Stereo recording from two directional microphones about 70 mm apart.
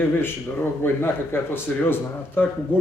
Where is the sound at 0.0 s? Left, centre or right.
Left.